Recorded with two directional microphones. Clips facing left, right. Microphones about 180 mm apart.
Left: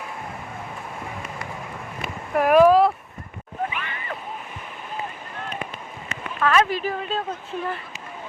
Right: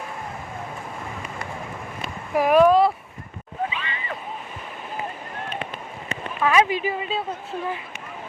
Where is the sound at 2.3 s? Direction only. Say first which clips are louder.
Left 1 dB; centre (ahead or behind).